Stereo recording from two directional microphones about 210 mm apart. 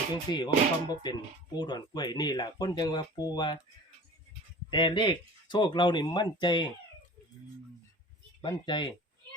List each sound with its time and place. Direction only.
0.1 s speech: 20° left (ahead or behind)
4.7 s speech: 20° left (ahead or behind)
8.4 s speech: 20° left (ahead or behind)